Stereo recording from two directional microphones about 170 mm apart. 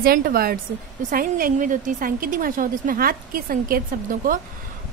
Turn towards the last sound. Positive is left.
turn(degrees=-55)  # may be behind; listen again after turning